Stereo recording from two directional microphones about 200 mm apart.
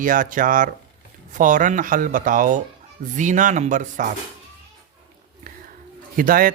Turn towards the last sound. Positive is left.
turn(degrees=-45)  # may be behind; listen again after turning